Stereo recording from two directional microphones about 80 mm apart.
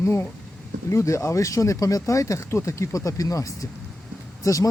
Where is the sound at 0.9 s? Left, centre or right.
Left.